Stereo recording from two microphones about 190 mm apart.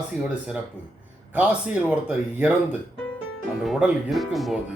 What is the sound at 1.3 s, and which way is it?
Speech, 5° right (ahead or behind).